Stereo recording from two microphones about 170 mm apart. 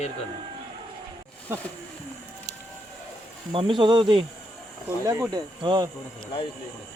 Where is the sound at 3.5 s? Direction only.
30° right (ahead or behind).